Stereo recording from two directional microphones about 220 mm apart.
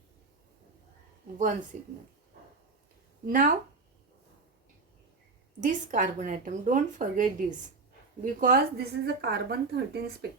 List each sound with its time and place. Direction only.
1.7 s a woman's voice: 35° right (ahead or behind)
3.2 s a woman's voice: 40° right (ahead or behind)
5.5 s a woman's voice: 35° right (ahead or behind)